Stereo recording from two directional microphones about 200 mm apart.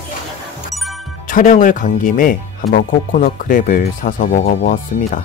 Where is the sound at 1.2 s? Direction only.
40° left (ahead or behind).